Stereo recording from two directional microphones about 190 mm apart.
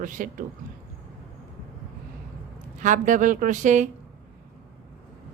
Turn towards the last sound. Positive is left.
turn(degrees=-40)  # may be behind; listen again after turning